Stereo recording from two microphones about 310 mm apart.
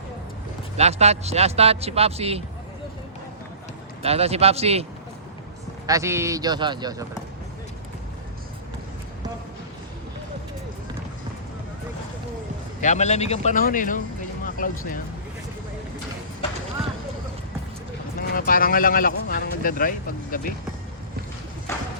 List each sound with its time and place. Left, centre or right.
0.8 s speech: right
4.0 s speech: centre
12.8 s speech: left
18.2 s speech: left
21.7 s clip-clop: centre